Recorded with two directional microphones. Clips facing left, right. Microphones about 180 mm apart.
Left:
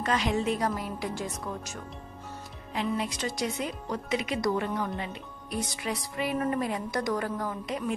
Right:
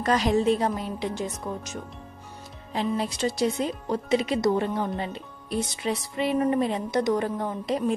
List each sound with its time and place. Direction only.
0.0 s speech: 40° right (ahead or behind); by 1.8 s 20° right (ahead or behind)
2.7 s speech: 30° right (ahead or behind)